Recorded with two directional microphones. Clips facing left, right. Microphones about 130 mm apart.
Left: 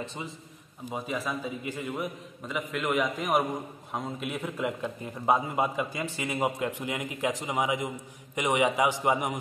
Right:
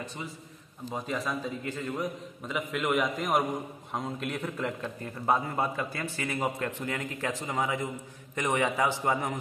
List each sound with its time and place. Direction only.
0.0 s a man's voice: 25° left (ahead or behind)
0.8 s a man's voice: 5° left (ahead or behind)